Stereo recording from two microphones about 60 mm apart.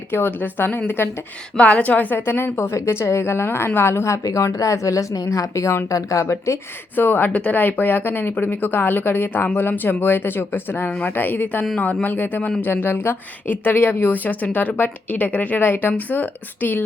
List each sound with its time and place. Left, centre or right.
0.1 s speech: left
1.5 s a woman's voice: left
2.1 s a woman's voice: left
4.2 s a woman's voice: left
6.9 s speech: left